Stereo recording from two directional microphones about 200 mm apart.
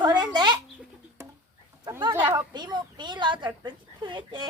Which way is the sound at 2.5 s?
20° right (ahead or behind).